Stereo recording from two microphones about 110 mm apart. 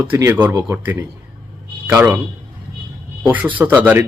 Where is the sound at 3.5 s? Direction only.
15° right (ahead or behind).